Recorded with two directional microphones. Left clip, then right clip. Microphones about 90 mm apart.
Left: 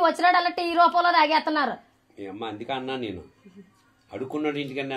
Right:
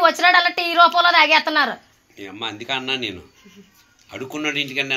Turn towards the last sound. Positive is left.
turn(degrees=35)  # may be behind; listen again after turning